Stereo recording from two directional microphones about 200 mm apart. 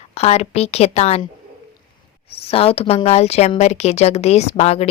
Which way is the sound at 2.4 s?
30° left (ahead or behind).